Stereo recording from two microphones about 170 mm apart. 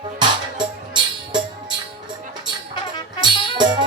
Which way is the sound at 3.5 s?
25° right (ahead or behind).